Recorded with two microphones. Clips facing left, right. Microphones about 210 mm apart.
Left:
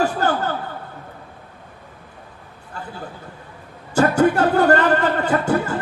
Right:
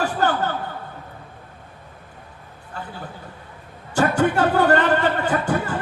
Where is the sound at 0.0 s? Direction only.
40° left (ahead or behind).